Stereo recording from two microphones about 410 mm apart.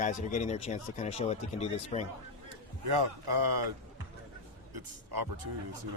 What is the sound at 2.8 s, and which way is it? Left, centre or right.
Speech, right.